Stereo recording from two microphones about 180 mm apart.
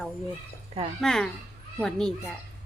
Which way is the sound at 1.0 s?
Centre (ahead or behind).